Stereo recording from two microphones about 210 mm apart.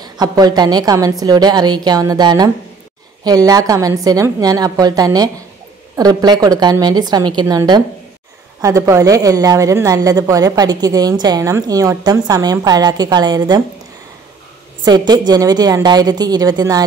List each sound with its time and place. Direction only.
0.0 s a woman's voice: 20° right (ahead or behind)
14.9 s a woman's voice: 20° right (ahead or behind)